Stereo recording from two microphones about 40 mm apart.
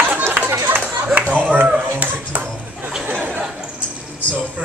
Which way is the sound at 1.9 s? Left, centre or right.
Right.